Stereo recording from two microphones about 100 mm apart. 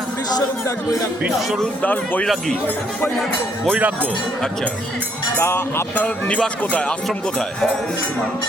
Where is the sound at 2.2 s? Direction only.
5° left (ahead or behind).